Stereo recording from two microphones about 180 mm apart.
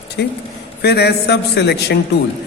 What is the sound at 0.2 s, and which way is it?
A man's voice, 65° left (ahead or behind).